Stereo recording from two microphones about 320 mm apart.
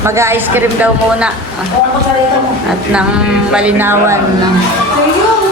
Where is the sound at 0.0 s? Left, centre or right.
Centre.